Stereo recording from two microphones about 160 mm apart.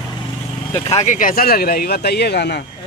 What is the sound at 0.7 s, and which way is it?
Speech, 40° left (ahead or behind).